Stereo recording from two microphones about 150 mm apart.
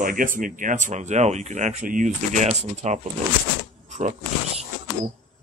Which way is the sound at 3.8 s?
50° right (ahead or behind).